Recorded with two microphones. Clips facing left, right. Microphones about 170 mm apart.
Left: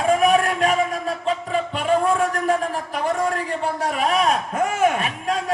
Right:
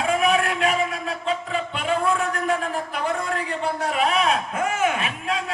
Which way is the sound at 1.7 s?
40° left (ahead or behind).